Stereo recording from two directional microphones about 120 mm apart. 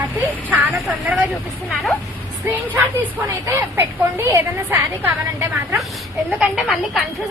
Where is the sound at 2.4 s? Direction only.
15° right (ahead or behind).